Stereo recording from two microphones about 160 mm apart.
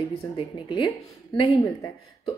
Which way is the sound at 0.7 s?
30° left (ahead or behind).